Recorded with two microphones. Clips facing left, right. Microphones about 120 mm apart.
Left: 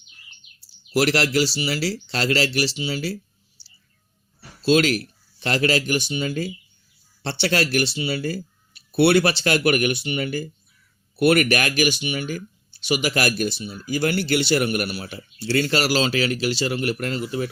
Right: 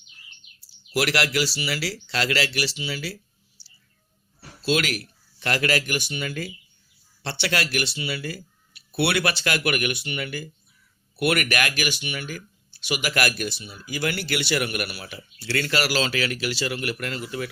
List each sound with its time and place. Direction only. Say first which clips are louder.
0.9 s speech: left 4 dB; 30° left (ahead or behind)
4.6 s speech: left 6 dB; 30° left (ahead or behind)
11.8 s speech: left 7 dB; 20° left (ahead or behind)